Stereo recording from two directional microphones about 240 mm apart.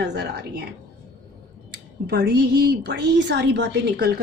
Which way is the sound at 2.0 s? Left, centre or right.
Right.